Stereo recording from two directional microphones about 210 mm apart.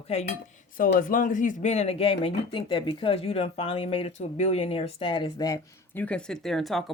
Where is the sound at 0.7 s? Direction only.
40° left (ahead or behind).